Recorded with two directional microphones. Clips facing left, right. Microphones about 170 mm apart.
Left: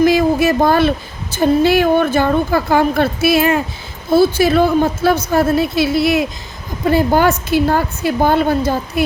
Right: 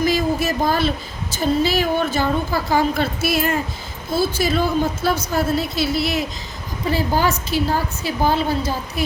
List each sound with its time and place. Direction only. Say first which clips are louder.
0.0 s a woman's voice: left 7 dB; 60° left (ahead or behind)